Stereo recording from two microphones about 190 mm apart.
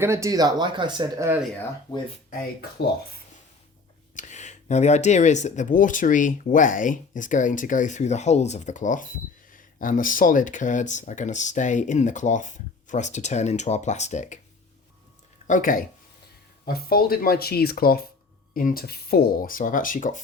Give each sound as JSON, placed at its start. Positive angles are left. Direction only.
{"t": 0.0, "sound": "speech", "side_deg": -15}
{"t": 4.1, "sound": "speech", "side_deg": 40}
{"t": 15.4, "sound": "speech", "side_deg": 45}